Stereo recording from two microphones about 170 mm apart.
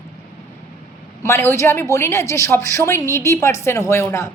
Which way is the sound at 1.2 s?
15° left (ahead or behind).